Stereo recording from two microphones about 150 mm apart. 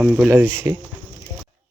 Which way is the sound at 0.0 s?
10° right (ahead or behind).